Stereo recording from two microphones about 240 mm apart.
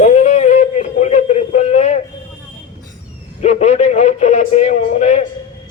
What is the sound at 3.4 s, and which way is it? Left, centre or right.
Speech, left.